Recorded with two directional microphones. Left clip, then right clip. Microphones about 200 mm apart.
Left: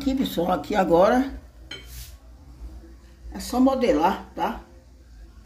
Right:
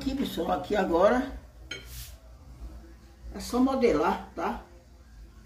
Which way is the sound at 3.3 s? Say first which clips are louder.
Left 5 dB; 45° left (ahead or behind).